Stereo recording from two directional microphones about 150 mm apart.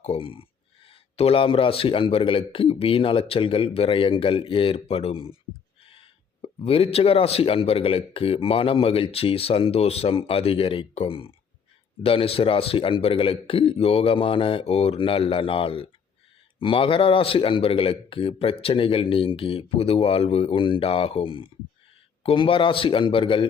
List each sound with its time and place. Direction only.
0.0 s speech: 40° left (ahead or behind)
5.8 s a sound: 35° left (ahead or behind)
6.6 s speech: 40° left (ahead or behind)